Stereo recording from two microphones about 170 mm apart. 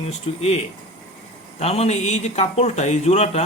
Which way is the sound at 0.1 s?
40° left (ahead or behind).